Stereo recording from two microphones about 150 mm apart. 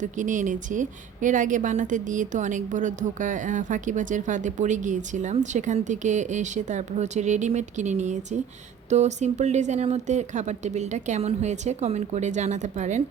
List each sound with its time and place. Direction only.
0.0 s a woman's voice: 60° right (ahead or behind)